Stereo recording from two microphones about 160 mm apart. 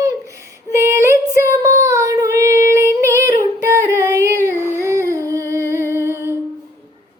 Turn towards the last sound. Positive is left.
turn(degrees=-15)  # may be behind; listen again after turning